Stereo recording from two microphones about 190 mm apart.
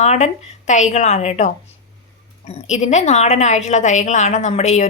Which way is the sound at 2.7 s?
40° left (ahead or behind).